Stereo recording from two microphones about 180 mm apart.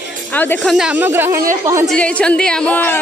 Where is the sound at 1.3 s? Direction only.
50° right (ahead or behind).